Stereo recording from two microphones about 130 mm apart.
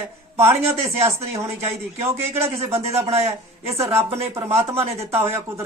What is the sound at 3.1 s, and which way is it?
Speech, 55° right (ahead or behind).